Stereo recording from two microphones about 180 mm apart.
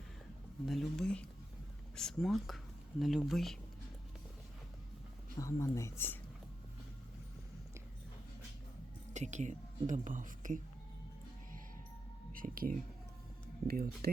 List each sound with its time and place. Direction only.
0.6 s speech: centre (ahead or behind)
5.4 s speech: 15° left (ahead or behind)
9.1 s speech: 40° right (ahead or behind)
12.3 s speech: 50° right (ahead or behind)